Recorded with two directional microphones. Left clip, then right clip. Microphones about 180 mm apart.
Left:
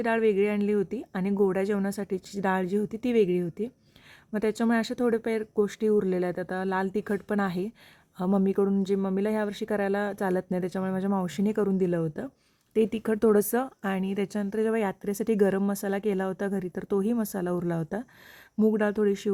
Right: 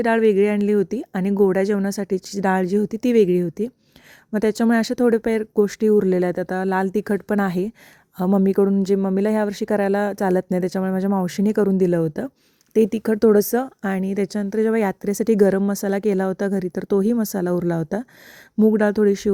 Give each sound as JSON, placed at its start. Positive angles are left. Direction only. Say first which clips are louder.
{"t": 0.0, "sound": "a woman's voice", "louder": "right 7 dB", "side_deg": -35}